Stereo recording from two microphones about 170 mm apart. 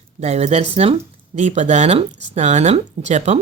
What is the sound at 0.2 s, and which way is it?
A woman's voice, 40° right (ahead or behind).